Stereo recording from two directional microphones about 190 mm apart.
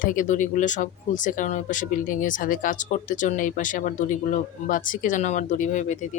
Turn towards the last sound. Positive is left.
turn(degrees=40)  # may be behind; listen again after turning